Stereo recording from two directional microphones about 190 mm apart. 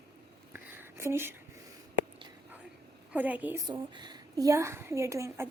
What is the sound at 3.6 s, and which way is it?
A woman's voice, 20° right (ahead or behind).